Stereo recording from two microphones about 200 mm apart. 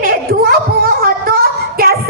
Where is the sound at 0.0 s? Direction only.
45° right (ahead or behind).